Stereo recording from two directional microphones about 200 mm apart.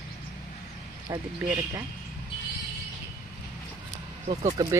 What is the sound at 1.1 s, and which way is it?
Speech, 15° right (ahead or behind).